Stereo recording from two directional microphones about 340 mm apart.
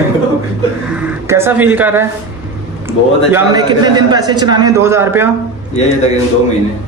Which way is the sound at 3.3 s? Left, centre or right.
Centre.